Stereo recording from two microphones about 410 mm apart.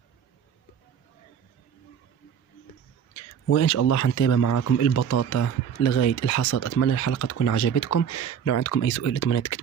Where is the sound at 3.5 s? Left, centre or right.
Left.